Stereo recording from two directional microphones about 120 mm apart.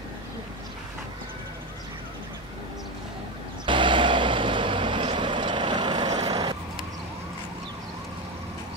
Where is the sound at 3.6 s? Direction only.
40° right (ahead or behind).